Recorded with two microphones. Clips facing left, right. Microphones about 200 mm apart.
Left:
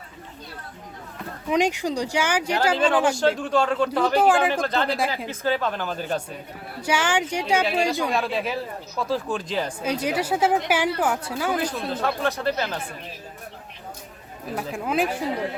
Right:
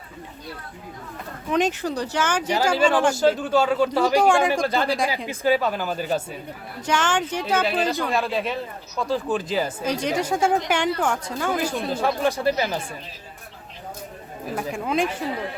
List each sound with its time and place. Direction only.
1.5 s a woman's voice: 10° left (ahead or behind)
2.7 s speech: 5° right (ahead or behind)
4.2 s speech: 5° left (ahead or behind)
4.6 s speech: 10° right (ahead or behind)
6.8 s a woman's voice: 10° left (ahead or behind)
7.6 s speech: centre (ahead or behind)
9.8 s a woman's voice: 10° left (ahead or behind)
11.6 s speech: 5° right (ahead or behind)
14.5 s speech: 5° left (ahead or behind)